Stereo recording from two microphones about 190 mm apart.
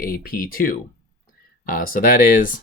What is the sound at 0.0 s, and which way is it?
Speech, 50° left (ahead or behind).